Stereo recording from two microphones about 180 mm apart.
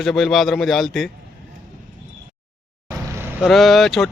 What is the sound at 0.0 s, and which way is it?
Speech, centre (ahead or behind).